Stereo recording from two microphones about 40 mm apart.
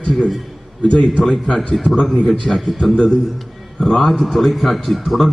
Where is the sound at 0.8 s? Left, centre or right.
Left.